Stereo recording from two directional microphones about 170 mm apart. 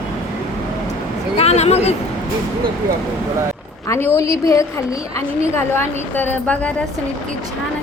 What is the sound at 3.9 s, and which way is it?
A woman's voice, 15° left (ahead or behind).